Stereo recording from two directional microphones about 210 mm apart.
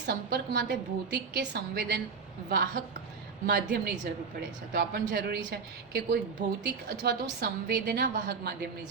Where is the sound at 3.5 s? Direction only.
45° right (ahead or behind).